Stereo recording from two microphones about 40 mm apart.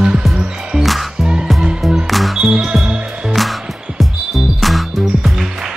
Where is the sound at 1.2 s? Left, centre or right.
Right.